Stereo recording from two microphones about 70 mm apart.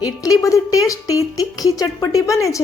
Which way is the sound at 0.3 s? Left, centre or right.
Left.